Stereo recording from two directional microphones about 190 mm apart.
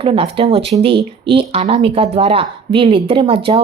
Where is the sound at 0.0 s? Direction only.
30° right (ahead or behind).